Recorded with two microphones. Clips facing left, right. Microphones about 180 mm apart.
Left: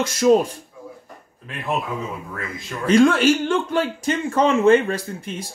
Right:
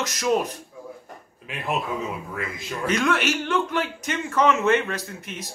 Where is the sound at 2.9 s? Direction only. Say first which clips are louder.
Left 9 dB; 30° left (ahead or behind).